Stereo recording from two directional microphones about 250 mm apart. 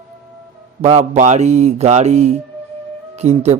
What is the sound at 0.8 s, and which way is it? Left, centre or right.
Speech, right.